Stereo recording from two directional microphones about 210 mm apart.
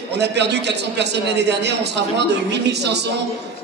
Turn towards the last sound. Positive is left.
turn(degrees=-55)  # may be behind; listen again after turning